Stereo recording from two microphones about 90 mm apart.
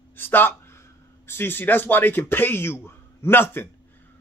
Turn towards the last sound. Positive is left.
turn(degrees=25)  # may be behind; listen again after turning